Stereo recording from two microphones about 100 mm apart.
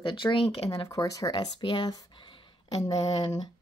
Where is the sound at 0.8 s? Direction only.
35° left (ahead or behind).